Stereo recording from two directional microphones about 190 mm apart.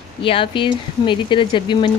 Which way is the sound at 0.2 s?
25° left (ahead or behind).